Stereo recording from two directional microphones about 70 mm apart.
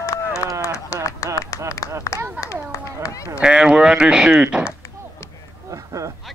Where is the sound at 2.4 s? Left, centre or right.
Left.